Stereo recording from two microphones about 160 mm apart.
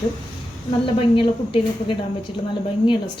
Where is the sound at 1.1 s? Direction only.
35° left (ahead or behind).